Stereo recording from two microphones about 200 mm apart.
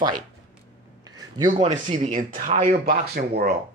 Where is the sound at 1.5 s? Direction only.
35° right (ahead or behind).